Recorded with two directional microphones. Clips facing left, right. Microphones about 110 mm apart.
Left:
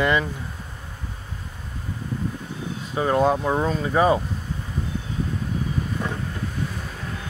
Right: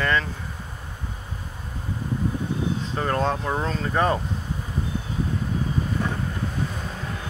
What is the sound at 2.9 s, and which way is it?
Speech, 10° left (ahead or behind).